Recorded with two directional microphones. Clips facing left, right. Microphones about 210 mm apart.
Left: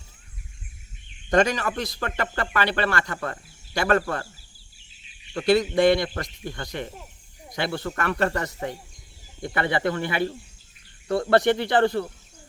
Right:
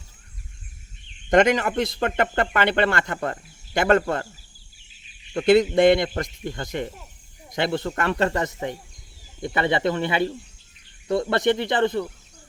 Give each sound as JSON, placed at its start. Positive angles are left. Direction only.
{"t": 1.3, "sound": "speech", "side_deg": -20}
{"t": 5.3, "sound": "speech", "side_deg": -25}